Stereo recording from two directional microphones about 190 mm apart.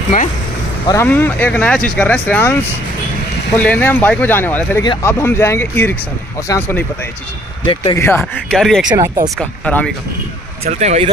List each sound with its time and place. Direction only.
0.8 s speech: 10° left (ahead or behind)
7.6 s speech: 25° left (ahead or behind)
8.0 s speech: 10° left (ahead or behind)
8.5 s speech: centre (ahead or behind)
8.8 s speech: 20° right (ahead or behind)
9.4 s speech: 5° left (ahead or behind)
10.7 s speech: 35° right (ahead or behind)